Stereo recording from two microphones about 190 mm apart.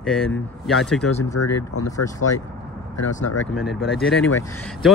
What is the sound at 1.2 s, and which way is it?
Speech, 15° left (ahead or behind).